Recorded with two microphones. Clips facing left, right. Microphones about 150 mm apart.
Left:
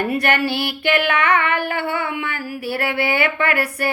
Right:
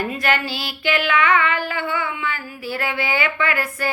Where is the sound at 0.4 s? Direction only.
60° left (ahead or behind).